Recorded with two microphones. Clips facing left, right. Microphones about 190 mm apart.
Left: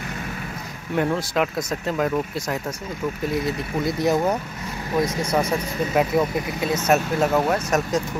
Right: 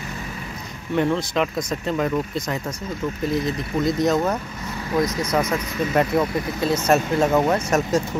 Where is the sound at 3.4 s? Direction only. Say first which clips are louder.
Right 2 dB; 20° right (ahead or behind).